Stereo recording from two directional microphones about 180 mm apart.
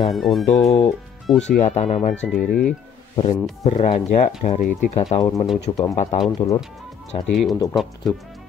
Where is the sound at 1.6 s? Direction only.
40° left (ahead or behind).